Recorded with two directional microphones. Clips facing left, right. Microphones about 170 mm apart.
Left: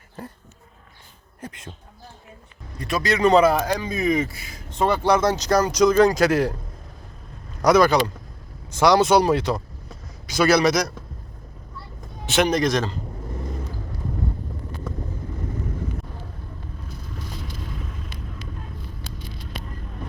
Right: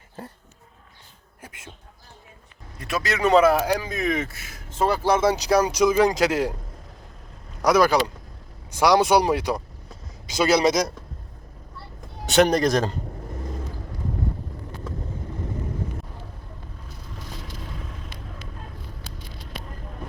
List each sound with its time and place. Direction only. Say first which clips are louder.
1.4 s speech: left 6 dB; 10° right (ahead or behind)
2.7 s speech: left 3 dB; 5° right (ahead or behind)
7.6 s a man's voice: left 2 dB; 5° right (ahead or behind); by 10.9 s 25° right (ahead or behind)
12.2 s a man's voice: right 2 dB; 40° right (ahead or behind)